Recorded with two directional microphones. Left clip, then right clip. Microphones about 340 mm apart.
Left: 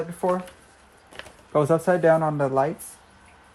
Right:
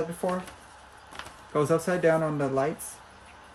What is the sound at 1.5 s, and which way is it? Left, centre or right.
Speech, centre.